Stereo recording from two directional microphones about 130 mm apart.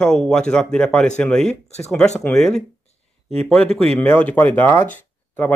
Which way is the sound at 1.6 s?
55° left (ahead or behind).